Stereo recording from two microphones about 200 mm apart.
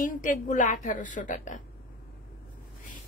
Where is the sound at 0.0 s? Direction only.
40° left (ahead or behind).